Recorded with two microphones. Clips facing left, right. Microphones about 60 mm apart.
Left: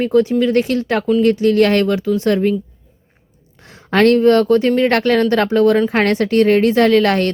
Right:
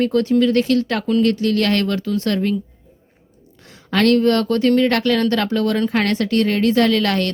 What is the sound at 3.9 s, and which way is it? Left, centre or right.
Speech, left.